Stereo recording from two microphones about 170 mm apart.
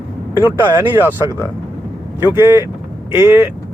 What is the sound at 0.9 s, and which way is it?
Speech, 10° right (ahead or behind).